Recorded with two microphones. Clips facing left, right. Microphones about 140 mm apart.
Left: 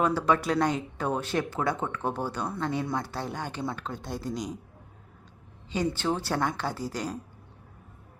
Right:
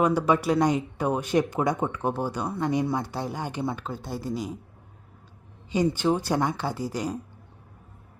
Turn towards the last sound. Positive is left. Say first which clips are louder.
# right 3 dB
turn(degrees=-10)  # may be behind; listen again after turning